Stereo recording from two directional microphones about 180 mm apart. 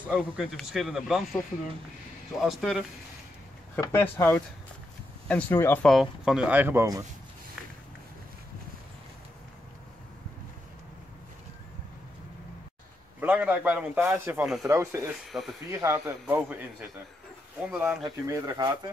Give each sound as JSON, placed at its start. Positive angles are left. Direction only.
{"t": 0.1, "sound": "speech", "side_deg": -5}
{"t": 2.3, "sound": "speech", "side_deg": 0}
{"t": 3.8, "sound": "speech", "side_deg": 10}
{"t": 5.9, "sound": "speech", "side_deg": 0}
{"t": 13.2, "sound": "speech", "side_deg": -10}
{"t": 14.4, "sound": "speech", "side_deg": 0}
{"t": 14.7, "sound": "speech", "side_deg": -15}
{"t": 15.3, "sound": "speech", "side_deg": -5}
{"t": 15.7, "sound": "speech", "side_deg": -15}
{"t": 17.6, "sound": "speech", "side_deg": -5}